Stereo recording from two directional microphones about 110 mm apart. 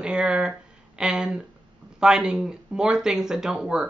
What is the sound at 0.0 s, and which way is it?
Speech, 10° right (ahead or behind).